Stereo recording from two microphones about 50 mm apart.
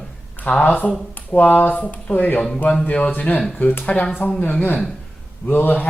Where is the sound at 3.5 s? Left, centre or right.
Left.